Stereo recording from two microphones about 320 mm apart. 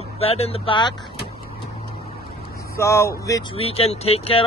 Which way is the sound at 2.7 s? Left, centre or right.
Centre.